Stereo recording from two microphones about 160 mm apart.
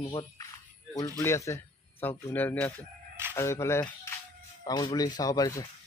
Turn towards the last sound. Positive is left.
turn(degrees=20)  # may be behind; listen again after turning